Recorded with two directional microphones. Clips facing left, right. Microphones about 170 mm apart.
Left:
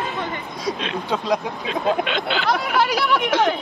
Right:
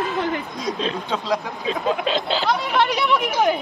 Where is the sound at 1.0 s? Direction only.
15° left (ahead or behind).